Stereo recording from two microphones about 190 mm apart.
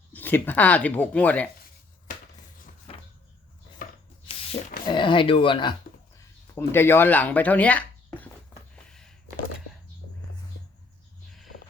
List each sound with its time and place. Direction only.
0.1 s speech: 10° left (ahead or behind)
2.9 s vehicle: 30° left (ahead or behind)
4.3 s a sound: 30° left (ahead or behind)
4.9 s speech: 25° left (ahead or behind)
6.5 s speech: 10° left (ahead or behind)
8.7 s a sound: 5° left (ahead or behind)